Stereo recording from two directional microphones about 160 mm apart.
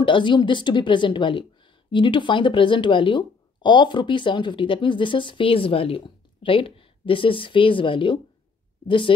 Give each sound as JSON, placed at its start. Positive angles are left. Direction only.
{"t": 0.0, "sound": "a woman's voice", "side_deg": 30}